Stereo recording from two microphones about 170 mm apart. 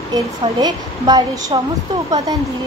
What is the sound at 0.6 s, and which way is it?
Speech, 25° right (ahead or behind).